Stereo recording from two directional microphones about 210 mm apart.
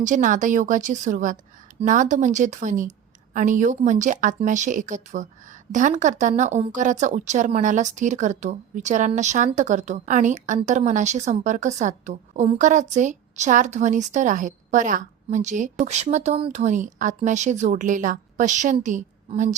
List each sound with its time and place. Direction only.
0.0 s a woman's voice: 35° right (ahead or behind)